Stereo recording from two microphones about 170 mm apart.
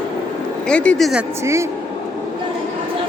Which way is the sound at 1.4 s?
15° right (ahead or behind).